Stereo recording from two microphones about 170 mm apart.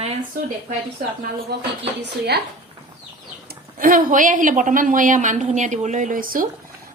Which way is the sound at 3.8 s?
55° right (ahead or behind).